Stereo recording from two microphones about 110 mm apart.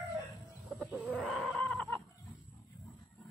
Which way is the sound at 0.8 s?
10° right (ahead or behind).